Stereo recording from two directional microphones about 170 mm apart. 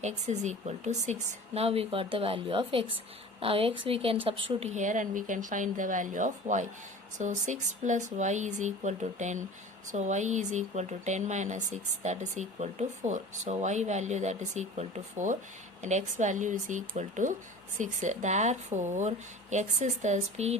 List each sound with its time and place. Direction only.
0.0 s a woman's voice: 40° right (ahead or behind)